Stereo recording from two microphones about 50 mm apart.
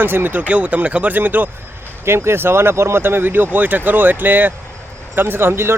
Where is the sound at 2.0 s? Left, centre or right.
Right.